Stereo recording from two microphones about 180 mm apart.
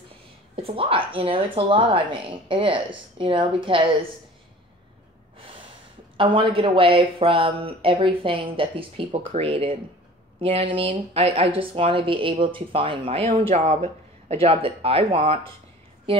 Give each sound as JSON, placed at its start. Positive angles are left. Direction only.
{"t": 0.6, "sound": "speech", "side_deg": -30}
{"t": 6.1, "sound": "a woman's voice", "side_deg": -30}